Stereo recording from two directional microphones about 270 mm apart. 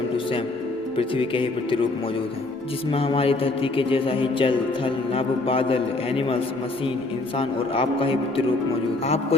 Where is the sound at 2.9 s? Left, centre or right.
Left.